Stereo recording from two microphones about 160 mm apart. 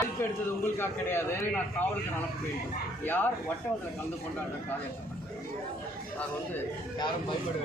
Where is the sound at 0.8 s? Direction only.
15° left (ahead or behind).